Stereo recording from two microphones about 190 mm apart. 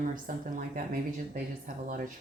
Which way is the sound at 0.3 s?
45° right (ahead or behind).